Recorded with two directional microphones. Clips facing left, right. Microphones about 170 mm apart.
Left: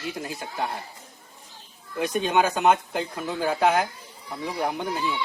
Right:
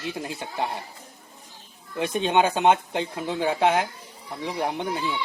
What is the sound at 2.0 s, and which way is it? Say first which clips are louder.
Speech: right 1 dB; 25° right (ahead or behind).